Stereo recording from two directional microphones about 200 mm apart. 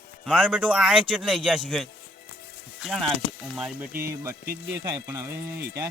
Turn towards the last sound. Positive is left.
turn(degrees=-10)  # may be behind; listen again after turning